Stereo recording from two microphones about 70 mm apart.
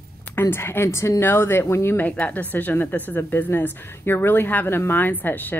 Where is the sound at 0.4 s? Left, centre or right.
Left.